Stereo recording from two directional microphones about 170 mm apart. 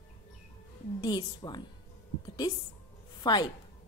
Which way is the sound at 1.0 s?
25° left (ahead or behind).